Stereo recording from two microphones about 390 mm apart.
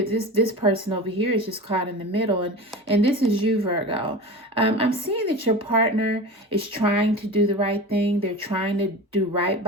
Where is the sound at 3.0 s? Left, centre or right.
Centre.